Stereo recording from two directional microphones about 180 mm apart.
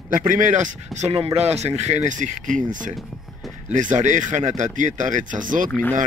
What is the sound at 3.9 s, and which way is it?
Speech, 45° right (ahead or behind).